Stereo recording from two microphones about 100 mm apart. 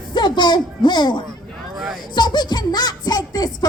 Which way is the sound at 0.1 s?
50° left (ahead or behind).